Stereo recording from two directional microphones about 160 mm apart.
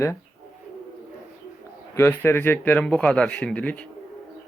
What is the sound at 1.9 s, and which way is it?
Speech, 15° left (ahead or behind).